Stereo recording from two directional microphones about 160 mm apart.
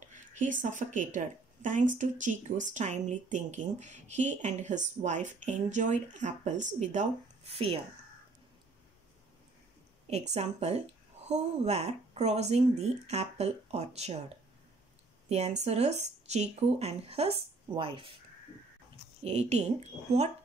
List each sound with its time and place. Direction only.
0.1 s a woman's voice: 50° right (ahead or behind)
10.0 s a woman's voice: 45° right (ahead or behind)
15.2 s speech: 45° right (ahead or behind)
19.2 s speech: 40° right (ahead or behind)